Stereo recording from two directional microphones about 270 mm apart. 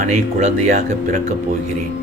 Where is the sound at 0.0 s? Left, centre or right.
Right.